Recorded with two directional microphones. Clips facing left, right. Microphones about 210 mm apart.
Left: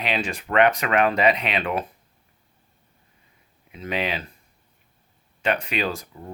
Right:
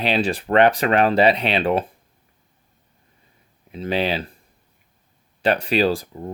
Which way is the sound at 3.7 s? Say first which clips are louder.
Right 5 dB; 30° right (ahead or behind).